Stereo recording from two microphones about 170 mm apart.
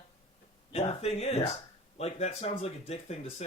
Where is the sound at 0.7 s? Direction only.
35° left (ahead or behind).